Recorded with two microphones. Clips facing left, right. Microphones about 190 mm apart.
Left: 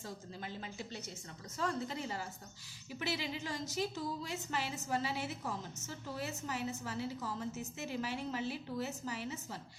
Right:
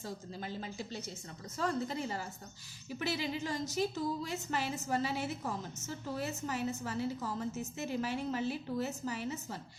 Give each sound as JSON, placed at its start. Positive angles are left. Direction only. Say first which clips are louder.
{"t": 0.0, "sound": "a woman's voice", "louder": "right 3 dB", "side_deg": -35}